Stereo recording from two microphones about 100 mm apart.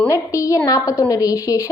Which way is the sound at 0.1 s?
30° left (ahead or behind).